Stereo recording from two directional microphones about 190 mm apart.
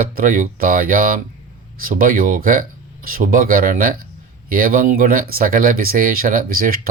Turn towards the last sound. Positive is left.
turn(degrees=-50)  # may be behind; listen again after turning